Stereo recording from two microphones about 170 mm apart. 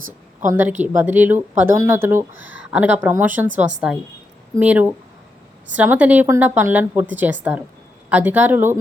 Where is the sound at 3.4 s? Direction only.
45° right (ahead or behind).